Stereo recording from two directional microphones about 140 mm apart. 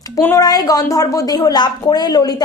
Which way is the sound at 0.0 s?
20° left (ahead or behind).